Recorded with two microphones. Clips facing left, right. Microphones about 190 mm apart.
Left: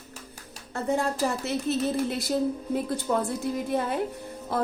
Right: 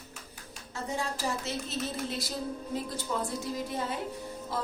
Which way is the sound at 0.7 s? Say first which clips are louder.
Left 8 dB; 60° left (ahead or behind).